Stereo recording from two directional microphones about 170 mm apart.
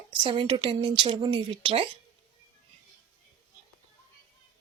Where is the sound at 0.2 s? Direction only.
30° right (ahead or behind).